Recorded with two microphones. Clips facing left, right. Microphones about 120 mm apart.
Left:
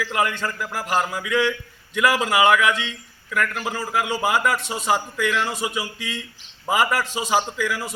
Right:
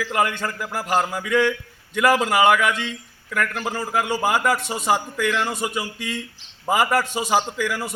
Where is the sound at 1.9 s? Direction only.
45° right (ahead or behind).